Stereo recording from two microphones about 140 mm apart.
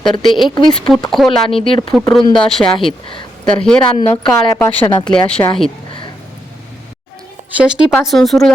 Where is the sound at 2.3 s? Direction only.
5° left (ahead or behind).